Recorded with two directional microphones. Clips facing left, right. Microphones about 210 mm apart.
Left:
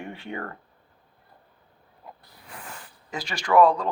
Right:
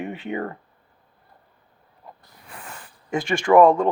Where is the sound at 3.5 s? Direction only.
45° right (ahead or behind).